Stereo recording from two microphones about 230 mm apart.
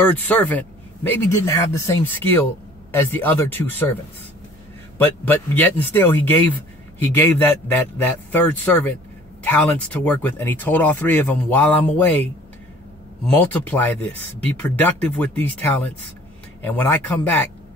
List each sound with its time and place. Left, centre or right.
0.0 s speech: centre
13.4 s speech: centre